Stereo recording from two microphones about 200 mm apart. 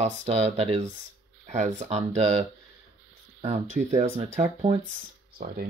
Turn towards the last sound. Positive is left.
turn(degrees=-50)  # may be behind; listen again after turning